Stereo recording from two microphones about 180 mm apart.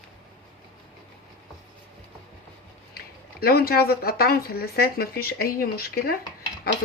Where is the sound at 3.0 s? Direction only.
60° left (ahead or behind).